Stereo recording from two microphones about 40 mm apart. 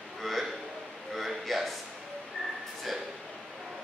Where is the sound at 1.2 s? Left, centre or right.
Centre.